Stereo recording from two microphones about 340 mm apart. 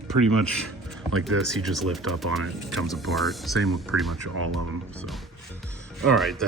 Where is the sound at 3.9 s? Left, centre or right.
Right.